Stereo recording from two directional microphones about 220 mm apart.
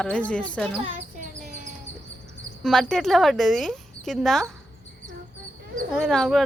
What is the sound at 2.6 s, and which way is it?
Speech, centre (ahead or behind).